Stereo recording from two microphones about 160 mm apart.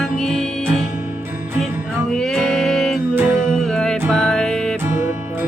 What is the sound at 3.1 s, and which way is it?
Music, 15° right (ahead or behind).